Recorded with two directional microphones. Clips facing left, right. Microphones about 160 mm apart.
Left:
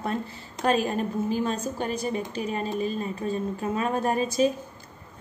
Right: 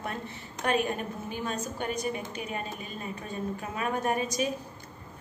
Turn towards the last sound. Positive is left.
turn(degrees=30)  # may be behind; listen again after turning